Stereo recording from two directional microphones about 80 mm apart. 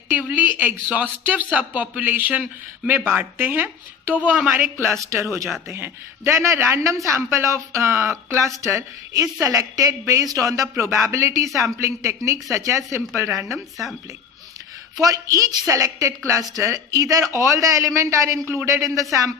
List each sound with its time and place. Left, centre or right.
0.1 s speech: centre
5.0 s a woman's voice: right
15.0 s a woman's voice: right